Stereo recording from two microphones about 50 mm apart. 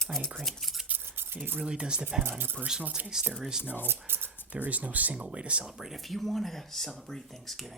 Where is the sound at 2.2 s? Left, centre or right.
Right.